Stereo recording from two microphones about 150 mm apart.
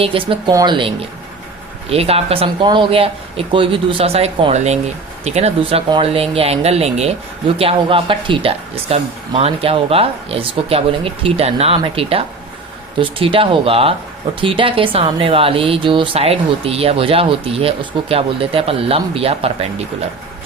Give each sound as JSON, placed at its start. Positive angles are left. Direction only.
{"t": 0.0, "sound": "speech", "side_deg": -35}